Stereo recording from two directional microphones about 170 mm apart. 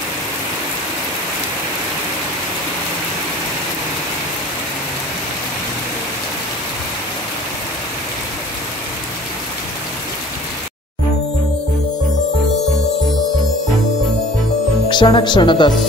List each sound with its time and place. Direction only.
14.9 s speech: 25° left (ahead or behind)